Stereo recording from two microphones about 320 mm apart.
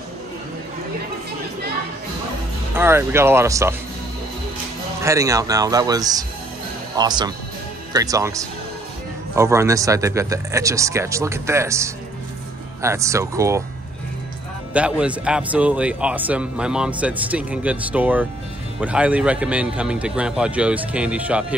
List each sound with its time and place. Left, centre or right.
2.7 s speech: centre
5.0 s speech: centre
14.7 s a man's voice: centre